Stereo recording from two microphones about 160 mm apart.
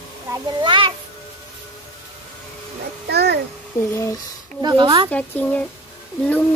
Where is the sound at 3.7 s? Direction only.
15° left (ahead or behind).